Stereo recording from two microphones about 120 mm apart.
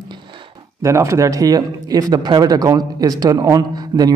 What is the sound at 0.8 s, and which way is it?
Speech, 25° right (ahead or behind).